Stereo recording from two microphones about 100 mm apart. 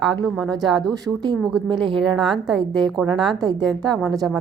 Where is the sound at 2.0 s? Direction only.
Centre (ahead or behind).